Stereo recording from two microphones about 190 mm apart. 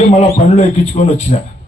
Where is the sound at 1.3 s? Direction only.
40° left (ahead or behind).